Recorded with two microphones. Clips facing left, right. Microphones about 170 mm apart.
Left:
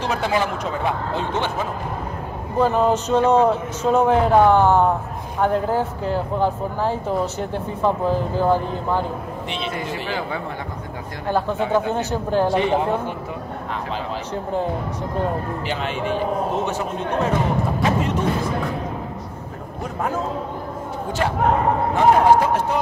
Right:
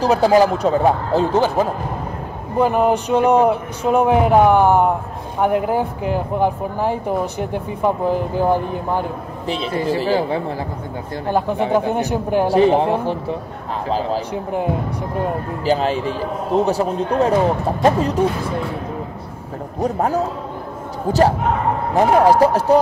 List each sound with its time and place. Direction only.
0.0 s speech: 35° right (ahead or behind)
2.6 s speech: 15° right (ahead or behind)
9.5 s speech: 35° right (ahead or behind)
11.3 s speech: 15° right (ahead or behind)
12.4 s speech: 35° right (ahead or behind)
14.3 s speech: 10° right (ahead or behind)
15.6 s speech: 35° right (ahead or behind)
19.8 s speech: 40° right (ahead or behind)
21.9 s speech: 35° right (ahead or behind)